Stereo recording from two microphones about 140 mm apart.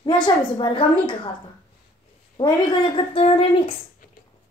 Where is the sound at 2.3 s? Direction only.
35° left (ahead or behind).